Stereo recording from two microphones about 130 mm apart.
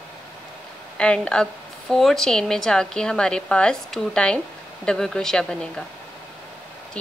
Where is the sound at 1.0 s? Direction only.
10° left (ahead or behind).